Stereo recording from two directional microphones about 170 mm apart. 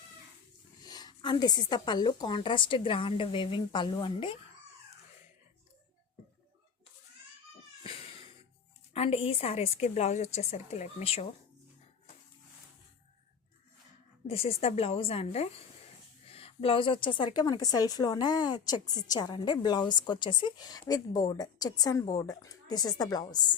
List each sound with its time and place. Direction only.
0.8 s a woman's voice: 25° left (ahead or behind)
8.9 s a woman's voice: 35° left (ahead or behind)
14.3 s a woman's voice: 35° left (ahead or behind)